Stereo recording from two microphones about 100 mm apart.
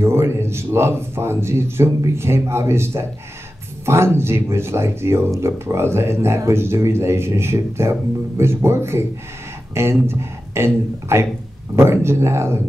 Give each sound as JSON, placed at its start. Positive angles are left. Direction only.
{"t": 0.0, "sound": "a man's voice", "side_deg": -25}
{"t": 10.0, "sound": "speech", "side_deg": -25}